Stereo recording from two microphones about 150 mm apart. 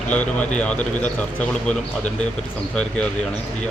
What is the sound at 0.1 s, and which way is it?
Speech, 10° left (ahead or behind).